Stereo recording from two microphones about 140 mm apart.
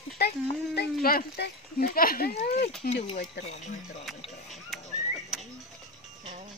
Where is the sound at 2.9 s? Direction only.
50° left (ahead or behind).